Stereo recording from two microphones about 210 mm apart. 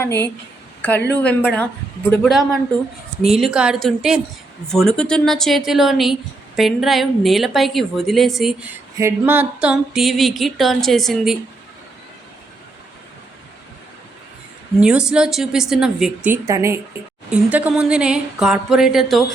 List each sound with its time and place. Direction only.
0.8 s speech: 10° left (ahead or behind)
2.0 s music: centre (ahead or behind)
14.8 s music: 5° right (ahead or behind)